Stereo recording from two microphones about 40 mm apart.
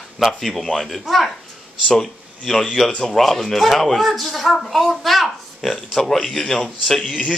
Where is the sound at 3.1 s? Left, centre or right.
Centre.